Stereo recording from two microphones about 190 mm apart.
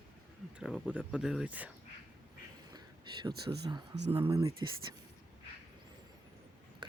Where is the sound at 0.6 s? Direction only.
5° right (ahead or behind).